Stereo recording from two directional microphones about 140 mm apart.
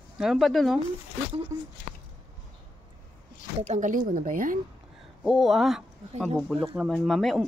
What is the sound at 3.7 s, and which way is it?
Speech, 65° right (ahead or behind).